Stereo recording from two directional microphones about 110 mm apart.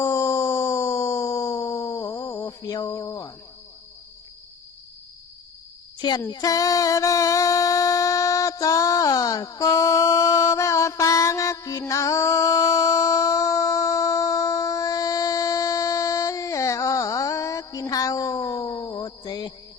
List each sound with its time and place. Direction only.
0.0 s music: 25° left (ahead or behind)
6.0 s speech: 45° left (ahead or behind)
6.3 s music: 35° left (ahead or behind)
18.9 s a sound: 40° left (ahead or behind)